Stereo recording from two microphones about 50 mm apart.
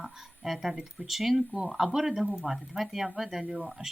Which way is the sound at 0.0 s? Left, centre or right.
Centre.